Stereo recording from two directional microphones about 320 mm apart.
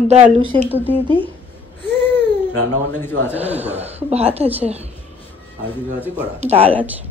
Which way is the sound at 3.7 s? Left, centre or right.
Centre.